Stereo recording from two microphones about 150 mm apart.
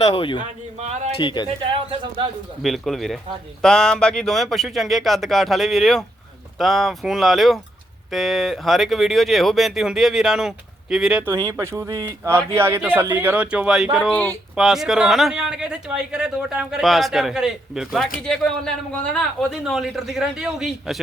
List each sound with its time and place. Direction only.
0.0 s a man's voice: 35° left (ahead or behind)
2.6 s speech: centre (ahead or behind)
11.3 s speech: 20° right (ahead or behind); by 21.0 s 5° right (ahead or behind)